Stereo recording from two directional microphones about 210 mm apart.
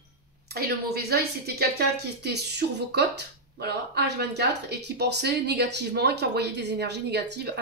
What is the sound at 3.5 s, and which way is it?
Speech, 50° right (ahead or behind).